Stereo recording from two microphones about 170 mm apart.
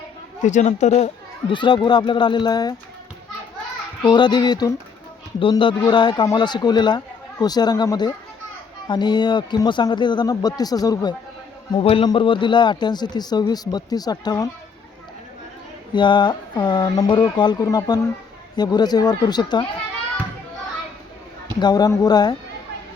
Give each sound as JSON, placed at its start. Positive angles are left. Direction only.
{"t": 0.4, "sound": "speech", "side_deg": 45}
{"t": 4.0, "sound": "speech", "side_deg": 25}
{"t": 11.7, "sound": "speech", "side_deg": 30}
{"t": 16.0, "sound": "speech", "side_deg": 25}
{"t": 21.6, "sound": "speech", "side_deg": 25}